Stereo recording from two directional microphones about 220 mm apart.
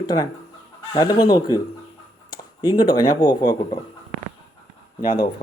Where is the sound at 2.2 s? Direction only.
20° left (ahead or behind).